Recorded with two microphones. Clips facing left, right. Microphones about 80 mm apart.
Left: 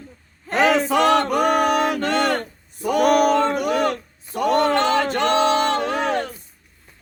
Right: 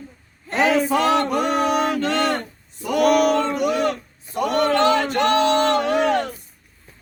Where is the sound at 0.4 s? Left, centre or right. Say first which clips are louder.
Left 1 dB; left.